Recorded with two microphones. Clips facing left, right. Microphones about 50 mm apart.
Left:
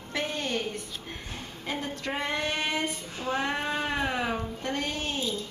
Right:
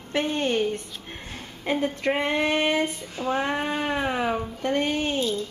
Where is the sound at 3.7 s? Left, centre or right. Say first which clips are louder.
Right 3 dB; centre.